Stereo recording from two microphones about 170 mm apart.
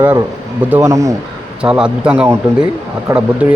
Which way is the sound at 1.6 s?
5° right (ahead or behind).